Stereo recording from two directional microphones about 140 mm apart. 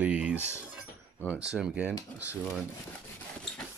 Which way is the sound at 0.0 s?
10° right (ahead or behind).